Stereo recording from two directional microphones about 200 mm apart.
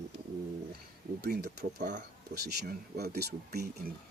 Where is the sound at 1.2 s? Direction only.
55° right (ahead or behind).